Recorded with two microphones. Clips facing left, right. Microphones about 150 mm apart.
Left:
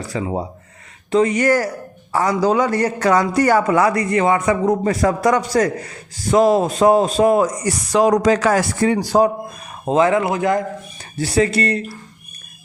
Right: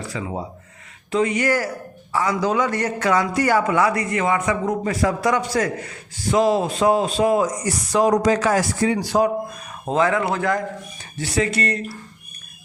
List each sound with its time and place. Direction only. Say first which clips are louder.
0.1 s a man's voice: left 8 dB; 35° left (ahead or behind); by 9.0 s 60° left (ahead or behind)
9.0 s a man's voice: left 5 dB; 35° left (ahead or behind)
9.8 s a man's voice: left 4 dB; 20° left (ahead or behind)
11.2 s a man's voice: left 5 dB; 35° left (ahead or behind)